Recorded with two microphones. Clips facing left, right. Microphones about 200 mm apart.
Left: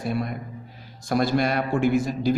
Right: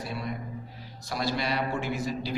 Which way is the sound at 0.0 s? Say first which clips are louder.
Left 9 dB; 50° left (ahead or behind).